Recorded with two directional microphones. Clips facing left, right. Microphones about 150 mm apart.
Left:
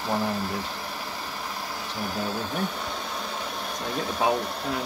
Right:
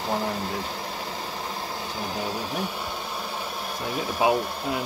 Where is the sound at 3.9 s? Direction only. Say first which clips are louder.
Right 2 dB; 10° right (ahead or behind).